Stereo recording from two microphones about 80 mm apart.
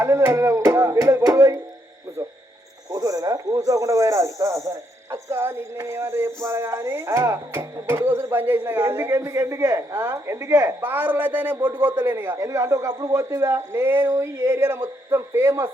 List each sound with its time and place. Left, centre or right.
0.0 s music: right
2.9 s speech: right
10.8 s a man's voice: right
12.5 s speech: right